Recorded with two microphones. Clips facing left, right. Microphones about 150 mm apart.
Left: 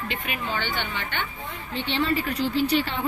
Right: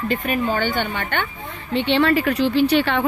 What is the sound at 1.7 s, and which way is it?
Speech, 70° right (ahead or behind).